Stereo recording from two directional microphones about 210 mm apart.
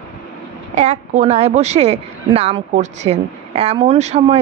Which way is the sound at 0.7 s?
35° right (ahead or behind).